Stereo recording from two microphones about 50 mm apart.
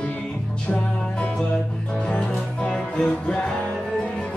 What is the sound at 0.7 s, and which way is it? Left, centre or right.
Music, left.